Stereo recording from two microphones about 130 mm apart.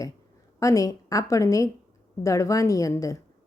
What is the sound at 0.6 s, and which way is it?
Speech, 25° left (ahead or behind).